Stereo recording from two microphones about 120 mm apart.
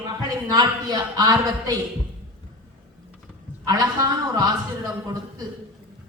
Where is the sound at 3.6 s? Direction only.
30° right (ahead or behind).